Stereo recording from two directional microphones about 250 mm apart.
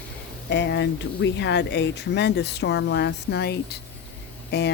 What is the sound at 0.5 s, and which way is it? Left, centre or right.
Speech, left.